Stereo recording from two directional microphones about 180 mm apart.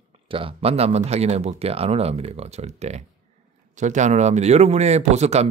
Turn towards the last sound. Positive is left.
turn(degrees=-35)  # may be behind; listen again after turning